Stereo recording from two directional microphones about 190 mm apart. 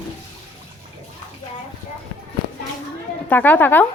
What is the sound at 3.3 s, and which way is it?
Speech, 10° left (ahead or behind).